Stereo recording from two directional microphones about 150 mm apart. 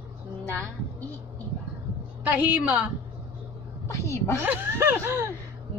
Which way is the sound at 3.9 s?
20° left (ahead or behind).